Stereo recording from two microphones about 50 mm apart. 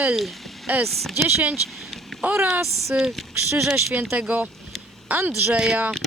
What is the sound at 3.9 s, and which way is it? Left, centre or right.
Speech, right.